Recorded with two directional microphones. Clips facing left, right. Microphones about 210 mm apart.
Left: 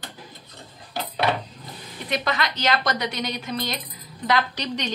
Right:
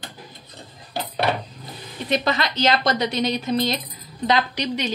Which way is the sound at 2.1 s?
30° right (ahead or behind).